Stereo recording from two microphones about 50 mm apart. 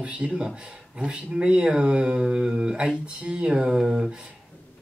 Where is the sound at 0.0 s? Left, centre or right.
Right.